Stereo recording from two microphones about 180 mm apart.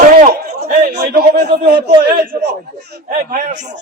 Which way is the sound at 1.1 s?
65° right (ahead or behind).